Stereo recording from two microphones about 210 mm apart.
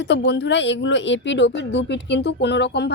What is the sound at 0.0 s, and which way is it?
A woman's voice, 55° left (ahead or behind).